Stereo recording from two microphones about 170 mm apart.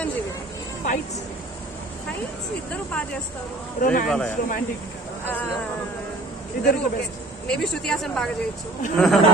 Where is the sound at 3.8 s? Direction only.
50° left (ahead or behind).